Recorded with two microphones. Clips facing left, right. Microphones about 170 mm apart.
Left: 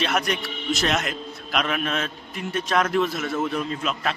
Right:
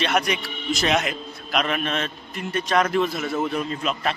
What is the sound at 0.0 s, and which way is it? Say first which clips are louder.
Speech: right 1 dB; centre (ahead or behind).